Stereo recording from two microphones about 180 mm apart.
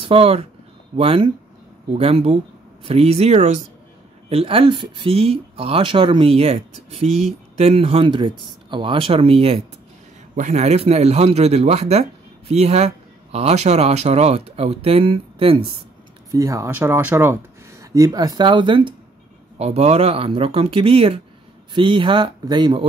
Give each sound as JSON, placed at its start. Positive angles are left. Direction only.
{"t": 0.0, "sound": "a man's voice", "side_deg": -30}
{"t": 16.3, "sound": "a man's voice", "side_deg": -15}